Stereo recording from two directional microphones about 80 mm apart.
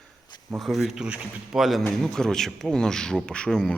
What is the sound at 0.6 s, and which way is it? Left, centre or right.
Speech, centre.